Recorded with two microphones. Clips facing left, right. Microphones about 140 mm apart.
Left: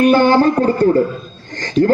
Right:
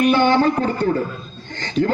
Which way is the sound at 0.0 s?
40° left (ahead or behind).